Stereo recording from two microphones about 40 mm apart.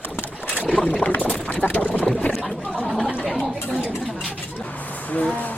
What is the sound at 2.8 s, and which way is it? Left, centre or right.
Gargling, centre.